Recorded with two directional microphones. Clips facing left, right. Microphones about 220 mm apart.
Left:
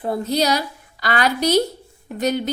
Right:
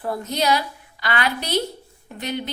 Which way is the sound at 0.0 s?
25° left (ahead or behind).